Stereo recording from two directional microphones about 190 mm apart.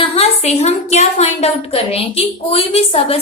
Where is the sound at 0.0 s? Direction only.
30° left (ahead or behind).